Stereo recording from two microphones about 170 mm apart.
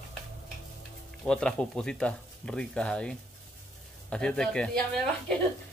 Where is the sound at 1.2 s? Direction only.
5° left (ahead or behind).